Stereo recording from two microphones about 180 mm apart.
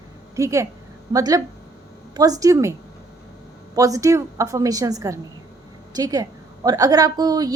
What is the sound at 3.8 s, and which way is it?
A woman's voice, 20° right (ahead or behind).